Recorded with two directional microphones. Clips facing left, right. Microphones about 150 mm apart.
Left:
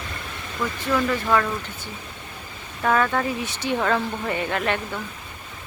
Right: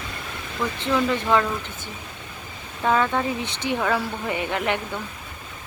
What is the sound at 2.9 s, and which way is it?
Speech, 15° right (ahead or behind).